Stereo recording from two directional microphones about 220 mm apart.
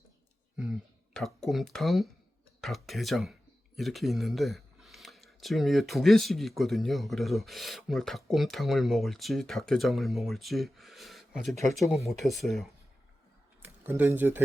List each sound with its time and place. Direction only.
0.5 s speech: centre (ahead or behind)